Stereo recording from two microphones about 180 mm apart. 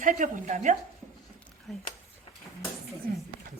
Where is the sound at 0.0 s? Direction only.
45° right (ahead or behind).